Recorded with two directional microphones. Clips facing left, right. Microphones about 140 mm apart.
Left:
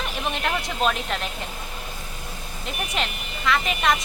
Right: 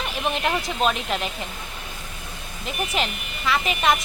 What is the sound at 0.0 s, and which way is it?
Speech, centre (ahead or behind).